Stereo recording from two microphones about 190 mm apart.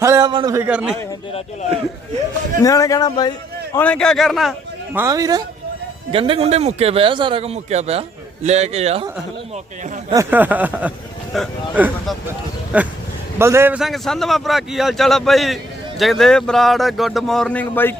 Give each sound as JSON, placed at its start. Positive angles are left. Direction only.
{"t": 0.0, "sound": "speech", "side_deg": -15}
{"t": 2.6, "sound": "a man's voice", "side_deg": 15}
{"t": 3.8, "sound": "a man's voice", "side_deg": 5}
{"t": 4.9, "sound": "a man's voice", "side_deg": -15}
{"t": 10.1, "sound": "a sound", "side_deg": -15}
{"t": 11.3, "sound": "a man's voice", "side_deg": 0}
{"t": 11.8, "sound": "a sound", "side_deg": -10}
{"t": 13.4, "sound": "a man's voice", "side_deg": -15}